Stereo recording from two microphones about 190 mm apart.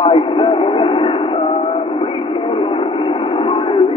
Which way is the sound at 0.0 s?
30° left (ahead or behind).